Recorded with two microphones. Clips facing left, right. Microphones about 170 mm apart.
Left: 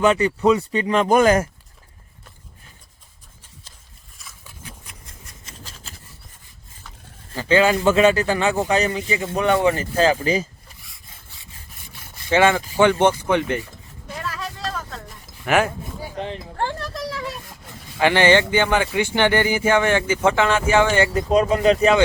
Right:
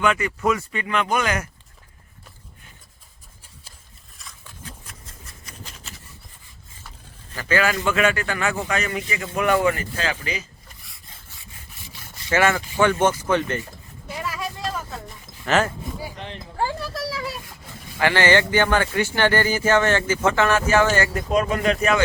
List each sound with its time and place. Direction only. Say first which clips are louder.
0.0 s speech: left 5 dB; 35° left (ahead or behind)
4.2 s a sound: right 1 dB; 5° left (ahead or behind)
7.3 s a man's voice: left 5 dB; 25° left (ahead or behind)
12.3 s speech: left 3 dB; 20° left (ahead or behind)
14.1 s vehicle: right 1 dB; 10° right (ahead or behind)
15.4 s speech: left 2 dB; 15° left (ahead or behind)
16.6 s a sound: right 1 dB; 5° right (ahead or behind)
18.0 s a man's voice: left 3 dB; 20° left (ahead or behind)